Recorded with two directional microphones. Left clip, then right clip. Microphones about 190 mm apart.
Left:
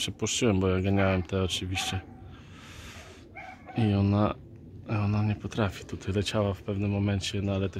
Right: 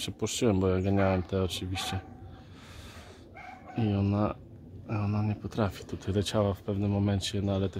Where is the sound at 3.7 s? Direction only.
10° left (ahead or behind).